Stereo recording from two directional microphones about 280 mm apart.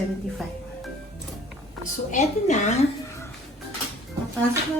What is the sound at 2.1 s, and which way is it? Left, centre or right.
Speech, left.